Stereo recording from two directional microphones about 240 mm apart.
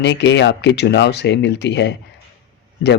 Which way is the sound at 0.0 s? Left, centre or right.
Left.